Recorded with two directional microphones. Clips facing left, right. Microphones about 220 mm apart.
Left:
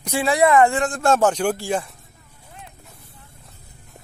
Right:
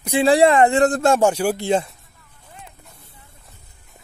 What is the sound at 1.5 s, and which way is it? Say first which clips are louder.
Speech: right 5 dB; 20° right (ahead or behind).